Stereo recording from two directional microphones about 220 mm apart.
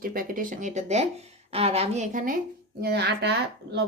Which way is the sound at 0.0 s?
40° right (ahead or behind).